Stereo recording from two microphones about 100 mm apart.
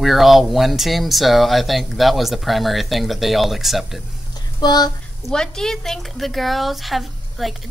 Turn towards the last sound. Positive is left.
turn(degrees=0)  # may be behind; listen again after turning